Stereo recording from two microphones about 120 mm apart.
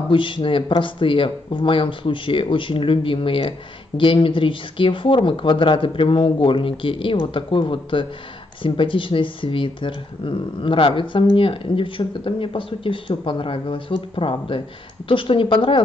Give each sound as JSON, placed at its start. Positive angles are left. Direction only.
{"t": 0.1, "sound": "speech", "side_deg": 45}